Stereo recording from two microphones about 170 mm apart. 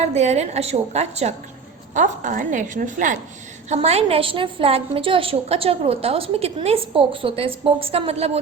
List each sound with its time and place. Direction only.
0.1 s a woman's voice: 40° right (ahead or behind)
3.7 s a woman's voice: 40° right (ahead or behind)